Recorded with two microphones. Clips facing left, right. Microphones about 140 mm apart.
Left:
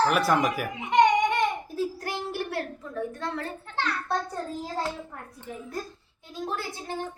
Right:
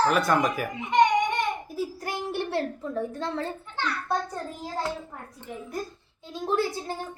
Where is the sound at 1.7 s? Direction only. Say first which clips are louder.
Left 1 dB; 15° right (ahead or behind).